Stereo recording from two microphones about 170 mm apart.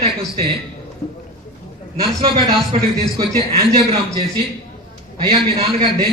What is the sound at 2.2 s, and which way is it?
A man's voice, 30° right (ahead or behind).